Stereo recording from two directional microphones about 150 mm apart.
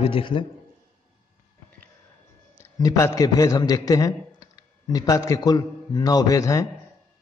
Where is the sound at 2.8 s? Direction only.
25° left (ahead or behind).